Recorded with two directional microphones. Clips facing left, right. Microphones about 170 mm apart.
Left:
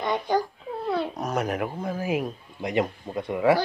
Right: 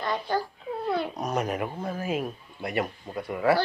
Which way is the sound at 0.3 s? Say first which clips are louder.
Left 3 dB; 15° left (ahead or behind).